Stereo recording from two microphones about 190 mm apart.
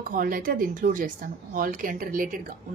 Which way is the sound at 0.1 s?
50° right (ahead or behind).